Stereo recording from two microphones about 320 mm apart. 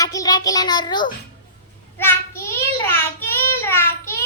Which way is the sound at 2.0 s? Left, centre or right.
Centre.